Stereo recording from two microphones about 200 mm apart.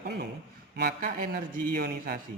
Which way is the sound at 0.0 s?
55° right (ahead or behind).